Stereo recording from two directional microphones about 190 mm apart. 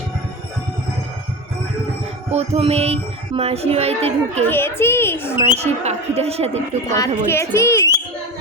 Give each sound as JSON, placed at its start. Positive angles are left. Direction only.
{"t": 2.3, "sound": "speech", "side_deg": -35}
{"t": 4.4, "sound": "speech", "side_deg": 10}
{"t": 5.5, "sound": "speech", "side_deg": -35}
{"t": 6.9, "sound": "speech", "side_deg": 15}